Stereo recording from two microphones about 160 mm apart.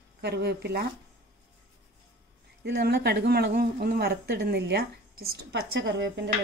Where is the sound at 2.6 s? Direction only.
90° right.